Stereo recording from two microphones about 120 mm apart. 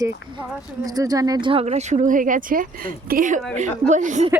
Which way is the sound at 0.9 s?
30° right (ahead or behind).